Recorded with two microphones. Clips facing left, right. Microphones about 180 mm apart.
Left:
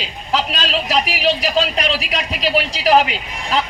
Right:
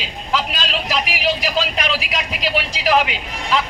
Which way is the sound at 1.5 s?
35° left (ahead or behind).